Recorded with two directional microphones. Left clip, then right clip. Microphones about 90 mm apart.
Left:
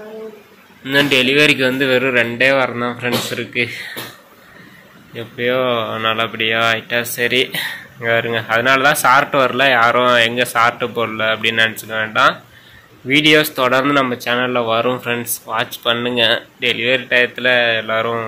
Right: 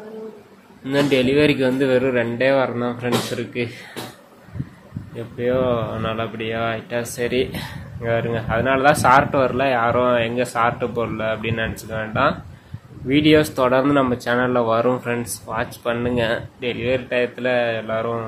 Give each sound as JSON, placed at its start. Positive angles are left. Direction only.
{"t": 0.8, "sound": "speech", "side_deg": -25}
{"t": 5.1, "sound": "a man's voice", "side_deg": -10}
{"t": 13.1, "sound": "speech", "side_deg": -30}
{"t": 14.9, "sound": "speech", "side_deg": -15}